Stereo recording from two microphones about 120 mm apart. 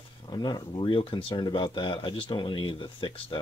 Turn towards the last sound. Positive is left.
turn(degrees=40)  # may be behind; listen again after turning